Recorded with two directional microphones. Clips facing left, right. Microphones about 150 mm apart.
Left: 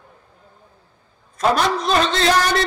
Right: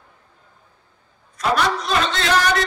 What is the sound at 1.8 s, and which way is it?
Speech, 35° left (ahead or behind).